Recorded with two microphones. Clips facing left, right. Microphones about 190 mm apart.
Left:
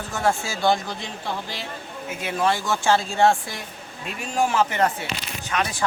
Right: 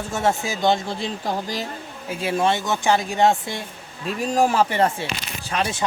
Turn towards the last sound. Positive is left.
turn(degrees=-30)  # may be behind; listen again after turning